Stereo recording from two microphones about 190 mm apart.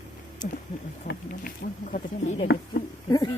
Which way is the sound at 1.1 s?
55° left (ahead or behind).